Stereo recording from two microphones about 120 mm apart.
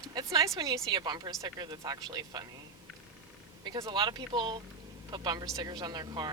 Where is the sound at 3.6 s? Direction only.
25° right (ahead or behind).